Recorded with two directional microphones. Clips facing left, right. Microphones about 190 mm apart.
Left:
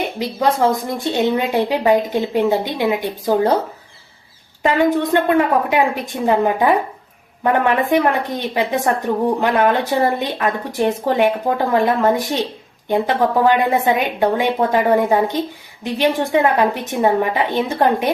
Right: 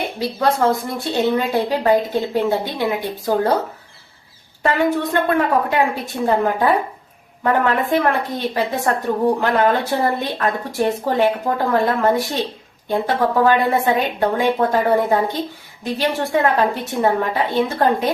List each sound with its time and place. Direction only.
0.2 s a woman's voice: 15° left (ahead or behind)
4.6 s a woman's voice: 15° left (ahead or behind)
13.4 s a woman's voice: 15° left (ahead or behind)